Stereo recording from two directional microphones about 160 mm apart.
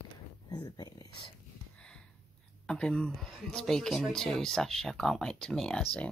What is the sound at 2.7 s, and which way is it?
Speech, 5° left (ahead or behind).